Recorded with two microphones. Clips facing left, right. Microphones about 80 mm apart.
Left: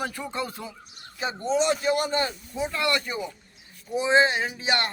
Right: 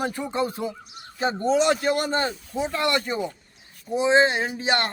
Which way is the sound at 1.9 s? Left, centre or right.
Right.